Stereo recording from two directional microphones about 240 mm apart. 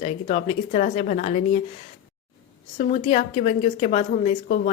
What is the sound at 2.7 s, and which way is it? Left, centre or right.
Speech, left.